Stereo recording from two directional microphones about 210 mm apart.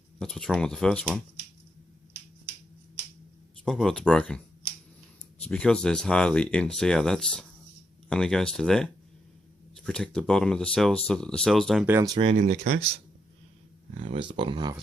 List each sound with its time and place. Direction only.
0.2 s speech: centre (ahead or behind)
3.6 s speech: centre (ahead or behind)
5.4 s speech: 5° left (ahead or behind)
11.9 s speech: 15° right (ahead or behind); by 12.7 s 35° right (ahead or behind)
14.1 s speech: 25° right (ahead or behind)